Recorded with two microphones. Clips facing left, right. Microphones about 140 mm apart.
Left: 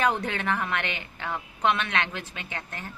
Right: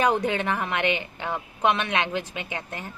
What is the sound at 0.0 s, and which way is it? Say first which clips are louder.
A woman's voice: right 3 dB; 15° right (ahead or behind).